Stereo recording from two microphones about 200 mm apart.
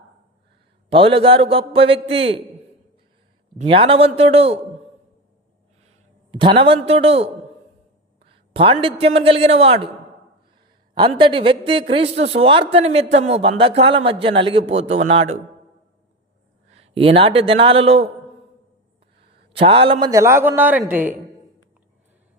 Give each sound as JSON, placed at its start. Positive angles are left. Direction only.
{"t": 0.9, "sound": "a man's voice", "side_deg": -25}
{"t": 3.6, "sound": "a man's voice", "side_deg": -30}
{"t": 6.3, "sound": "a man's voice", "side_deg": -25}
{"t": 8.3, "sound": "a man's voice", "side_deg": -25}
{"t": 10.9, "sound": "a man's voice", "side_deg": -25}
{"t": 16.6, "sound": "a man's voice", "side_deg": -30}
{"t": 19.5, "sound": "a man's voice", "side_deg": -30}